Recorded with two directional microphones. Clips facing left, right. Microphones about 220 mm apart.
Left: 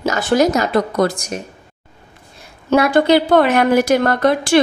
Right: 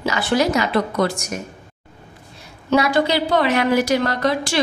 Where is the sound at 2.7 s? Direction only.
55° left (ahead or behind).